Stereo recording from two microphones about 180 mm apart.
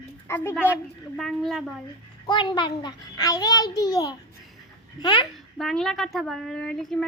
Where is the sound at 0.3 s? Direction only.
15° left (ahead or behind).